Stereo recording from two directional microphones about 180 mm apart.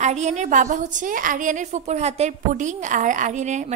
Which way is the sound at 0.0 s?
40° right (ahead or behind).